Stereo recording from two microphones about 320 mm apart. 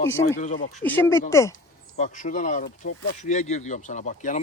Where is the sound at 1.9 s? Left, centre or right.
Left.